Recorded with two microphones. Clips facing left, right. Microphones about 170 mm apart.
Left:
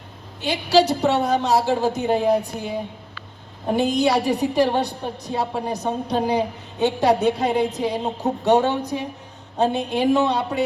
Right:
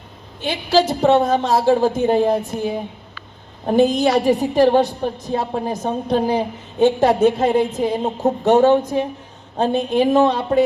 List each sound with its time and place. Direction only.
0.4 s a woman's voice: 50° right (ahead or behind)
3.8 s a woman's voice: 50° right (ahead or behind)